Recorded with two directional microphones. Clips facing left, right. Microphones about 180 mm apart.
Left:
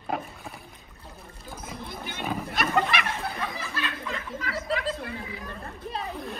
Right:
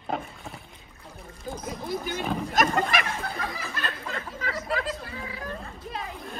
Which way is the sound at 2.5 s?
45° right (ahead or behind).